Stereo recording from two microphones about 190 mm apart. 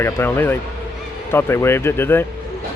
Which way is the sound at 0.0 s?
10° left (ahead or behind).